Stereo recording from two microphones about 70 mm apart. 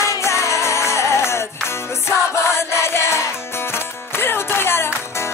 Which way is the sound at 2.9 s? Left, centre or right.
Left.